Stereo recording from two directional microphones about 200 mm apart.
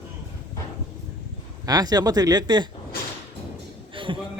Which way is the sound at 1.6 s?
20° right (ahead or behind).